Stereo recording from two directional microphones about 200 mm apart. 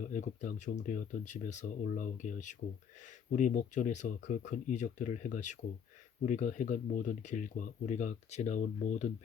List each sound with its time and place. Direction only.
0.0 s speech: 40° left (ahead or behind)